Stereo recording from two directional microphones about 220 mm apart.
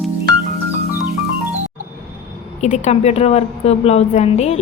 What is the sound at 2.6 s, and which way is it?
A woman's voice, 30° left (ahead or behind).